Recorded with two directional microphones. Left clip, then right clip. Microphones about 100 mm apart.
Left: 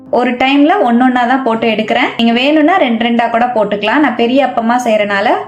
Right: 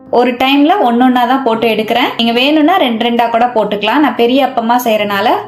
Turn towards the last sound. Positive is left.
turn(degrees=-15)  # may be behind; listen again after turning